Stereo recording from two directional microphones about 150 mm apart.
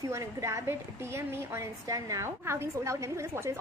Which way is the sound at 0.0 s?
20° right (ahead or behind).